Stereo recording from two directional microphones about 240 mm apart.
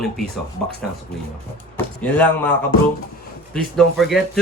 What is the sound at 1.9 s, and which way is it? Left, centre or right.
Speech, centre.